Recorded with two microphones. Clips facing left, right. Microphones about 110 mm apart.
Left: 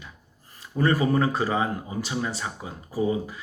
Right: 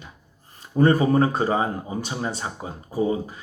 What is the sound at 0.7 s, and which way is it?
Speech, 25° right (ahead or behind).